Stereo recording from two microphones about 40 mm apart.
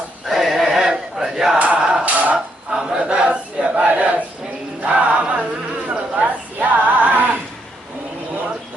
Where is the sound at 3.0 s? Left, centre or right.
Right.